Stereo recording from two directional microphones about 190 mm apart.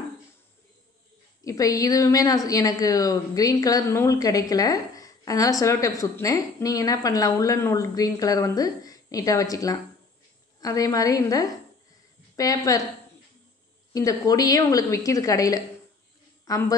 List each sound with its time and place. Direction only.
1.4 s a woman's voice: 20° left (ahead or behind)
13.9 s a woman's voice: 20° left (ahead or behind)